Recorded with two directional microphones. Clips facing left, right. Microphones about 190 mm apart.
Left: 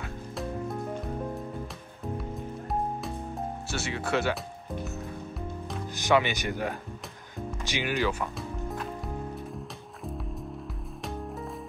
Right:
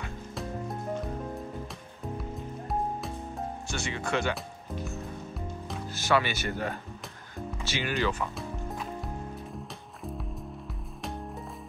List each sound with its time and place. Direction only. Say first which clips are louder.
3.6 s speech: left 1 dB; 5° left (ahead or behind)
5.9 s speech: left 2 dB; 15° left (ahead or behind)